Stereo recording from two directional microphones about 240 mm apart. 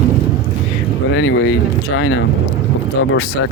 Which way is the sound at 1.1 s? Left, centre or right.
Left.